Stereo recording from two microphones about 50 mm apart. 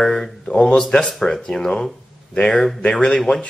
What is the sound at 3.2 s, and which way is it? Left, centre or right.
Speech, centre.